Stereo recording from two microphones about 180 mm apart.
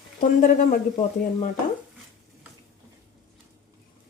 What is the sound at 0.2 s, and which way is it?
Speech, 50° left (ahead or behind).